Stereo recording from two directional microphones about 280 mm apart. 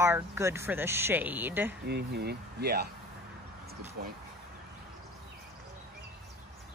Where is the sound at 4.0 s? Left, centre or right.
Right.